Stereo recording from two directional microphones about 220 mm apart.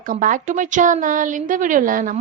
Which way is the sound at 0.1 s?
35° right (ahead or behind).